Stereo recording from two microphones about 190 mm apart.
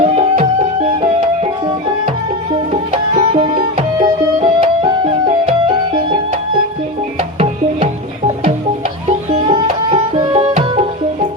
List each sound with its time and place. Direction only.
0.0 s music: 35° right (ahead or behind)
3.2 s music: 30° right (ahead or behind)
9.0 s music: 30° right (ahead or behind)